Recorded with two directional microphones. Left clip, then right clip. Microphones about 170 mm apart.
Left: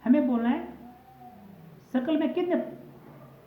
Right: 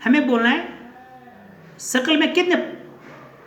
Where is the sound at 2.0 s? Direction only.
15° right (ahead or behind).